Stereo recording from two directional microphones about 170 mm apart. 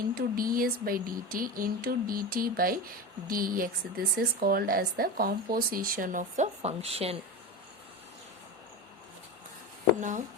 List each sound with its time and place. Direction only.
0.1 s speech: 60° right (ahead or behind); by 7.2 s 35° right (ahead or behind)
10.0 s speech: 50° right (ahead or behind)